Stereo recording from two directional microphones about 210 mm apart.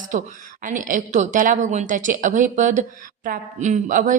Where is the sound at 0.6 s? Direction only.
40° right (ahead or behind).